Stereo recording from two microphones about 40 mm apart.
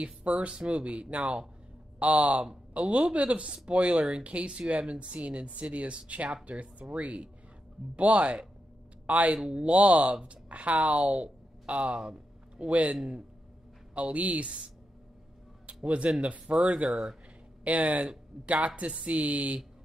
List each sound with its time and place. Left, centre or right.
0.0 s a man's voice: right
13.9 s speech: right
15.6 s a sound: right
16.2 s speech: right
16.9 s speech: centre
17.6 s speech: right